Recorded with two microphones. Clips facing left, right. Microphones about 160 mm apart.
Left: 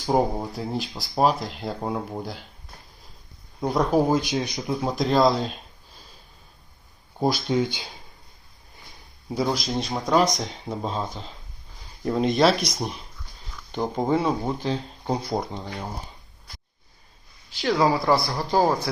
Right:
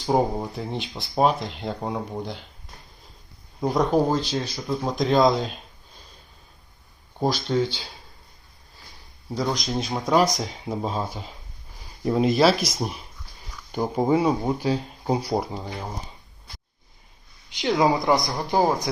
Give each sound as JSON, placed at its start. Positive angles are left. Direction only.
{"t": 0.0, "sound": "speech", "side_deg": 0}
{"t": 3.6, "sound": "speech", "side_deg": 0}
{"t": 7.2, "sound": "speech", "side_deg": 10}
{"t": 9.3, "sound": "speech", "side_deg": 10}
{"t": 17.5, "sound": "speech", "side_deg": -20}